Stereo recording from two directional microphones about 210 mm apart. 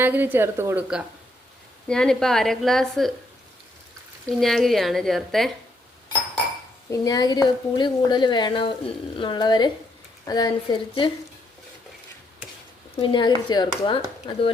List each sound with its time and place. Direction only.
0.0 s a woman's voice: 10° right (ahead or behind)
4.4 s a woman's voice: centre (ahead or behind)
6.9 s a woman's voice: 15° left (ahead or behind)
13.0 s a woman's voice: 20° left (ahead or behind)